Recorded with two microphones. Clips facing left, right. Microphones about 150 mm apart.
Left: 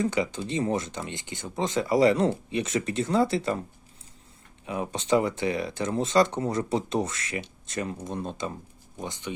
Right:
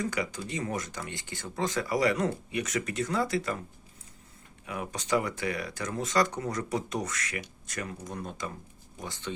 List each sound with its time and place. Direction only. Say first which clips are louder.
0.0 s speech: left 5 dB; 25° left (ahead or behind)
4.6 s speech: left 5 dB; 25° left (ahead or behind)